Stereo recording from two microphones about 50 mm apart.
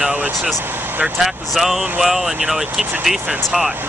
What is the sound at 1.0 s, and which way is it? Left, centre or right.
Speech, centre.